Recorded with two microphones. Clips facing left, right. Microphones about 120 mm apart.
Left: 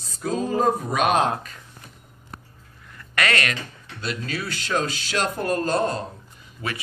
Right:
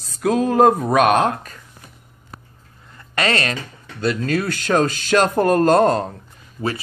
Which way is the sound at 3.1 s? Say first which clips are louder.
Right 3 dB; 30° right (ahead or behind).